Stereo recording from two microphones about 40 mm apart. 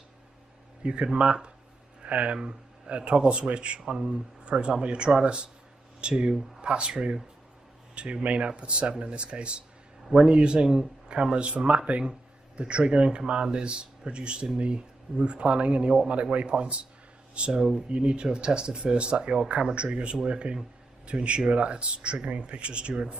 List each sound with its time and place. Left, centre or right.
0.8 s a man's voice: right
2.3 s a man's voice: right